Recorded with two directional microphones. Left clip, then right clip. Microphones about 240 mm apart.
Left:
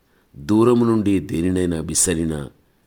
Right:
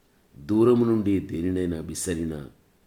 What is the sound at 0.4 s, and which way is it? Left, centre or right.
Speech, left.